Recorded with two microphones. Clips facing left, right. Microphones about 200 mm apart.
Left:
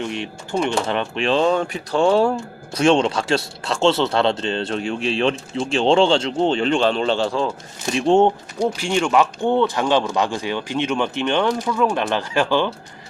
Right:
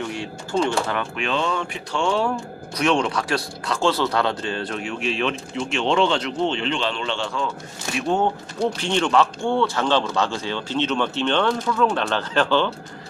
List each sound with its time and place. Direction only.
0.0 s speech: 20° left (ahead or behind)
8.5 s speech: 10° left (ahead or behind)